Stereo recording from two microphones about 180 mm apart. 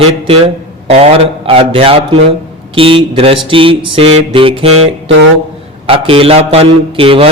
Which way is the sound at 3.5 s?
30° right (ahead or behind).